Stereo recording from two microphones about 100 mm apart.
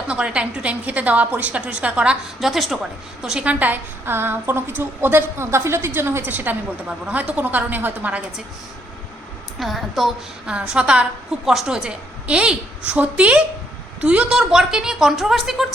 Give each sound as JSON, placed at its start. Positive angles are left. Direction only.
{"t": 0.1, "sound": "a woman's voice", "side_deg": -10}
{"t": 2.5, "sound": "a woman's voice", "side_deg": 0}
{"t": 9.6, "sound": "a woman's voice", "side_deg": 0}